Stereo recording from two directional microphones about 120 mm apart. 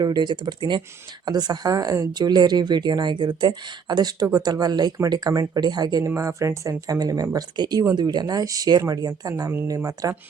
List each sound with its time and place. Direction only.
0.0 s speech: 35° right (ahead or behind)